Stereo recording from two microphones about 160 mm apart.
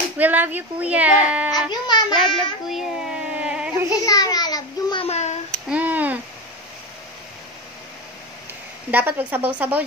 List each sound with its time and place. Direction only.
0.2 s speech: 10° right (ahead or behind)
1.7 s a child's voice: 25° left (ahead or behind)
2.7 s a sound: 5° right (ahead or behind)
4.0 s a child's voice: 25° left (ahead or behind)
5.0 s a child's voice: 45° left (ahead or behind)
5.7 s a sound: 10° right (ahead or behind)
8.9 s speech: 10° right (ahead or behind)